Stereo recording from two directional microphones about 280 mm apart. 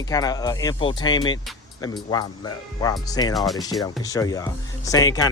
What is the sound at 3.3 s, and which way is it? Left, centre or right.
Speech, centre.